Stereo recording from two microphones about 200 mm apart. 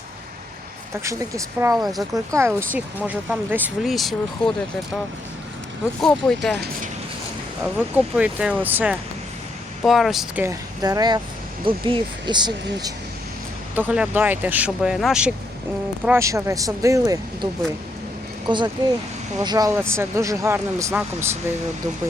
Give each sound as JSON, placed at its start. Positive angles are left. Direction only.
{"t": 1.0, "sound": "speech", "side_deg": -15}
{"t": 1.7, "sound": "speech", "side_deg": 0}
{"t": 2.1, "sound": "speech", "side_deg": -15}
{"t": 6.0, "sound": "speech", "side_deg": 5}
{"t": 7.8, "sound": "speech", "side_deg": -5}
{"t": 10.4, "sound": "speech", "side_deg": -15}
{"t": 13.7, "sound": "speech", "side_deg": -5}
{"t": 16.0, "sound": "speech", "side_deg": -15}